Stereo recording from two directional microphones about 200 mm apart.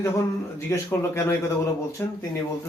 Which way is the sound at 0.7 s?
15° left (ahead or behind).